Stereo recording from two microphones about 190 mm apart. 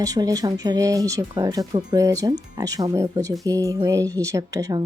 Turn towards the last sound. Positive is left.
turn(degrees=-15)  # may be behind; listen again after turning